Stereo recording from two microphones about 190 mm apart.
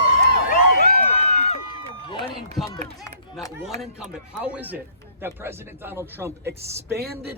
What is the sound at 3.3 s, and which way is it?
A man's voice, centre (ahead or behind).